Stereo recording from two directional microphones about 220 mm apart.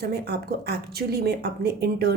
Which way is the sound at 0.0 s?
45° right (ahead or behind).